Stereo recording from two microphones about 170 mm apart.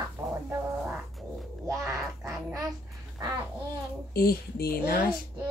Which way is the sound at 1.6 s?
20° right (ahead or behind).